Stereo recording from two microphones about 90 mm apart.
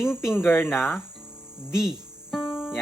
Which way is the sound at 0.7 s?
5° right (ahead or behind).